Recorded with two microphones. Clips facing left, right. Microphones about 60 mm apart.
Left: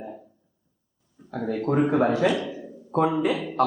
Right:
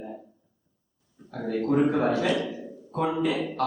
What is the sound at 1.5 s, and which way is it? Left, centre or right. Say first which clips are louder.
A man's voice: even; centre.